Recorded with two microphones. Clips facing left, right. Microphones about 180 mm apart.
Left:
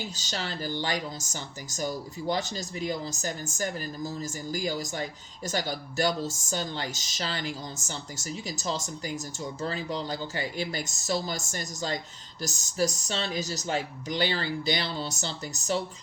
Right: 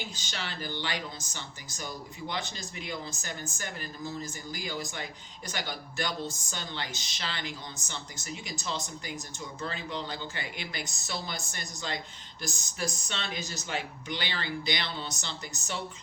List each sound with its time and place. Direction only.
0.2 s speech: 40° left (ahead or behind)